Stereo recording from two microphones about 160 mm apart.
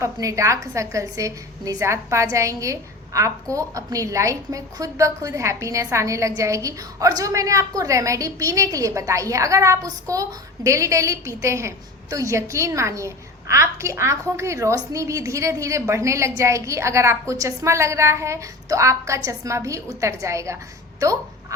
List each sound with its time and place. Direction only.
0.0 s a woman's voice: 20° right (ahead or behind)